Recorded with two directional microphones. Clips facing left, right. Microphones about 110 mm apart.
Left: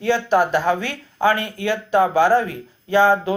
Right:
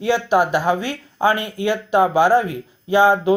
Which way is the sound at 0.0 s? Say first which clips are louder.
Right 1 dB; 15° right (ahead or behind).